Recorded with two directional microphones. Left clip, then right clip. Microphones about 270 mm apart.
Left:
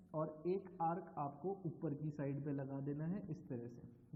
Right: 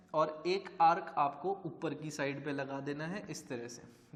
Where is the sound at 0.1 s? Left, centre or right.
Centre.